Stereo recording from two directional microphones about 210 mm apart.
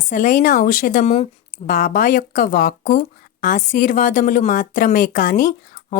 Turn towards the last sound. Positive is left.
turn(degrees=40)  # may be behind; listen again after turning